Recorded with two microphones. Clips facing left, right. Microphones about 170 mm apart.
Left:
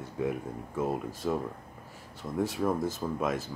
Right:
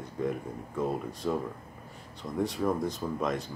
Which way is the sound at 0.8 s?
5° left (ahead or behind).